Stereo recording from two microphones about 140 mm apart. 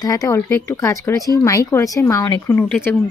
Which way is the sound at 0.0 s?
25° left (ahead or behind).